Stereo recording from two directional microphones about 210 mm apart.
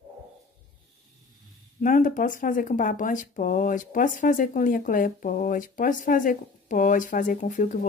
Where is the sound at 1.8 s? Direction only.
40° left (ahead or behind).